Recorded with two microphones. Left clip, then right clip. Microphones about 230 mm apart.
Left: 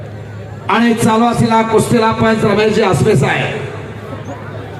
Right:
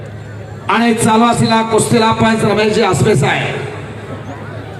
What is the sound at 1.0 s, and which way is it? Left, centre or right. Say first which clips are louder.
A man's voice: right 1 dB; right.